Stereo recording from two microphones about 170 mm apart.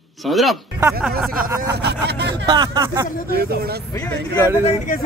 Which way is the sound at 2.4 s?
25° right (ahead or behind).